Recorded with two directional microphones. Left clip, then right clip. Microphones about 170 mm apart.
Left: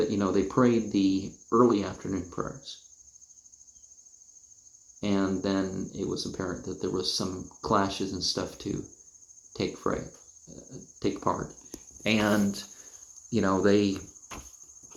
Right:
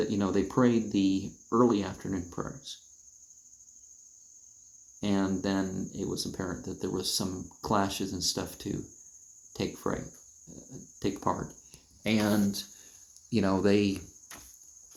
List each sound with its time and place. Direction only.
0.0 s speech: 15° right (ahead or behind)
4.9 s speech: 15° right (ahead or behind)